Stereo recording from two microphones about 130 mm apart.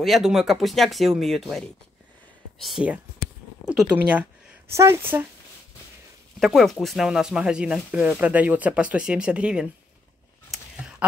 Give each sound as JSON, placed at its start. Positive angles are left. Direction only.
{"t": 0.0, "sound": "speech", "side_deg": 0}
{"t": 2.6, "sound": "speech", "side_deg": -5}
{"t": 6.4, "sound": "speech", "side_deg": 0}
{"t": 10.5, "sound": "a sound", "side_deg": 0}
{"t": 11.0, "sound": "speech", "side_deg": -10}